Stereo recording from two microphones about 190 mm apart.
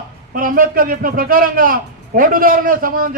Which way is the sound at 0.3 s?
50° right (ahead or behind).